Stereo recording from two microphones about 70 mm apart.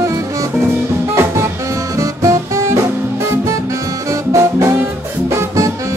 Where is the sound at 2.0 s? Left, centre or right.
Right.